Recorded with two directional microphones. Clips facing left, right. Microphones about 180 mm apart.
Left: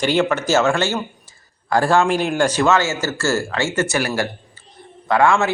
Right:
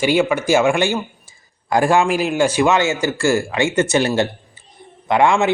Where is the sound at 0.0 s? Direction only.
10° right (ahead or behind).